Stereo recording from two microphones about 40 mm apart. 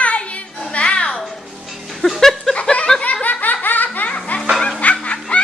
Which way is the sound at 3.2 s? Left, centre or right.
Left.